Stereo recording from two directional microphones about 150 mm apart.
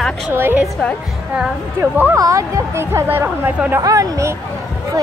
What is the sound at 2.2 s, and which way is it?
A woman's voice, 20° right (ahead or behind).